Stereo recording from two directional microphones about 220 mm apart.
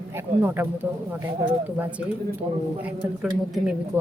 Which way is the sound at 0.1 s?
10° right (ahead or behind).